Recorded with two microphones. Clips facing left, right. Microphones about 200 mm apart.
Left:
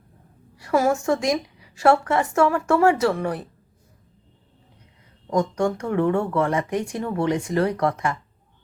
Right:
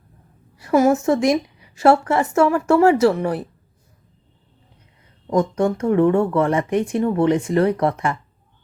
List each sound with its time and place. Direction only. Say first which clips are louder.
0.6 s a woman's voice: right 5 dB; 20° right (ahead or behind)
5.4 s a woman's voice: right 3 dB; 25° right (ahead or behind)